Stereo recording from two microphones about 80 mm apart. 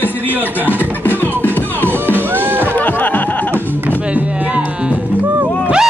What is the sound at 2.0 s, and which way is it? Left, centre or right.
Music, right.